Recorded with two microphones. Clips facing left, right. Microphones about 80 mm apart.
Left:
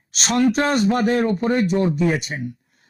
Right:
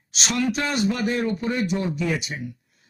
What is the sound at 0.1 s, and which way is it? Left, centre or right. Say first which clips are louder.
Speech: left 6 dB; left.